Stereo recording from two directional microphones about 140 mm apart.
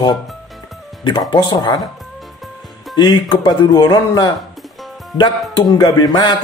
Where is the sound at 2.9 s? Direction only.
35° left (ahead or behind).